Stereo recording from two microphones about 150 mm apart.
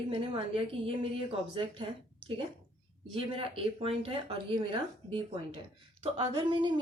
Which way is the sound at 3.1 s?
35° right (ahead or behind).